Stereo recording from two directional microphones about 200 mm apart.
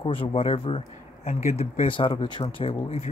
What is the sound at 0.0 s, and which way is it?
Speech, 25° left (ahead or behind).